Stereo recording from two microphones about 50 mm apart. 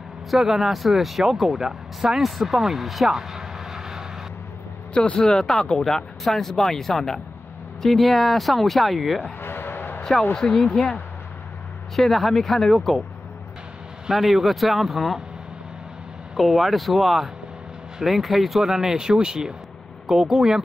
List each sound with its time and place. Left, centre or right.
0.3 s speech: centre
4.9 s speech: centre
9.2 s a sound: left
10.3 s speech: centre
11.9 s speech: centre
14.1 s speech: centre
16.3 s speech: centre